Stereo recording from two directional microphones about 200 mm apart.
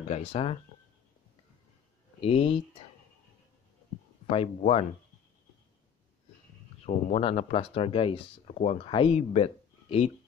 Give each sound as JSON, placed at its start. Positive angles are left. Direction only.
{"t": 0.1, "sound": "speech", "side_deg": 30}
{"t": 2.1, "sound": "speech", "side_deg": 25}
{"t": 4.3, "sound": "speech", "side_deg": 30}
{"t": 6.9, "sound": "speech", "side_deg": 30}